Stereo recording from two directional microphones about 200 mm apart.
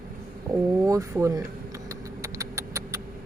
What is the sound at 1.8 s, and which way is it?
Vehicle, 15° right (ahead or behind).